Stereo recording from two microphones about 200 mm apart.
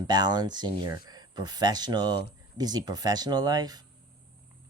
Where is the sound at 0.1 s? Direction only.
20° right (ahead or behind).